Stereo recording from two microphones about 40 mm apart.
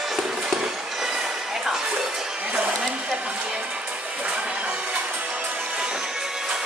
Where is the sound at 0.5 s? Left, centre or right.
Centre.